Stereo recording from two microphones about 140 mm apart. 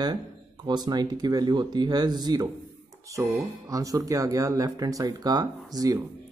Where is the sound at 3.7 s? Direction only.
25° right (ahead or behind).